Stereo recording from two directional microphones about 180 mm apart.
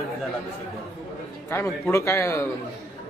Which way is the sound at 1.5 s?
15° left (ahead or behind).